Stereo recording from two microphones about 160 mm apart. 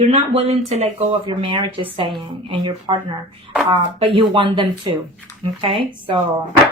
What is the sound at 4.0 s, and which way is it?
Speech, 35° right (ahead or behind).